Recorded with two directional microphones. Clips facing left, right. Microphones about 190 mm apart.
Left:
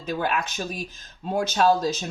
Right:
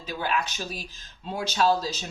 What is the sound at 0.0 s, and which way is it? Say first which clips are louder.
Speech: left 3 dB; 50° left (ahead or behind).